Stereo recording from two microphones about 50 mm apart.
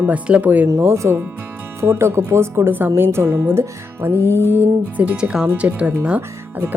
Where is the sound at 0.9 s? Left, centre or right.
Right.